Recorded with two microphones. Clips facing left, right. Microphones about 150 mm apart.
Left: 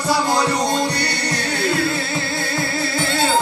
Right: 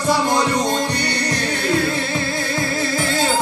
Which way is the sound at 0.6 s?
35° left (ahead or behind).